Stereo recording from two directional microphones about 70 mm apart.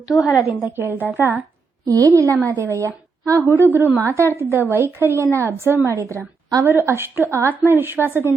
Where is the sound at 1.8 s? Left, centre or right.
Right.